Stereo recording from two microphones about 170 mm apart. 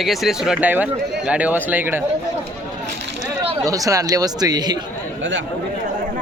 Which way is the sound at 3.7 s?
20° right (ahead or behind).